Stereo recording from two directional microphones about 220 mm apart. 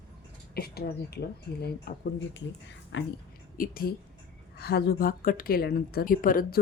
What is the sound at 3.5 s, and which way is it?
A woman's voice, 40° left (ahead or behind).